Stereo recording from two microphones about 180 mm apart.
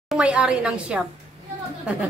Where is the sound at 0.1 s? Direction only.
5° right (ahead or behind).